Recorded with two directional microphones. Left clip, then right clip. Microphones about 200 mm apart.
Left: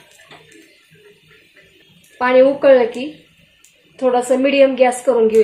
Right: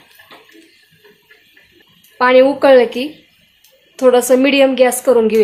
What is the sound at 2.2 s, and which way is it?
A woman's voice, 30° right (ahead or behind).